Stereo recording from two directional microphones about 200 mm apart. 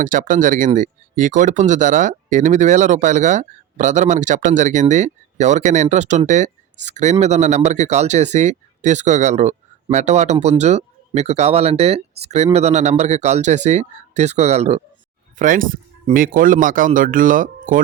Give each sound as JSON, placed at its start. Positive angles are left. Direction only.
{"t": 0.0, "sound": "speech", "side_deg": -40}